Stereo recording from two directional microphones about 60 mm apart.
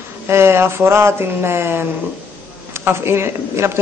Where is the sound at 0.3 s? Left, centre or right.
Right.